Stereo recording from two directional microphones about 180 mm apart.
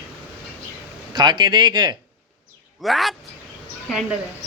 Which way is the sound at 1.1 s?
25° right (ahead or behind).